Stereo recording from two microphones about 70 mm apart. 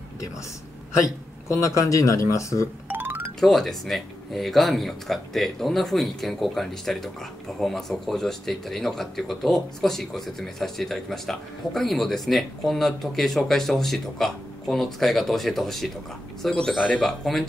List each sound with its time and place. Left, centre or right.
1.0 s speech: left
2.9 s music: right
3.3 s speech: centre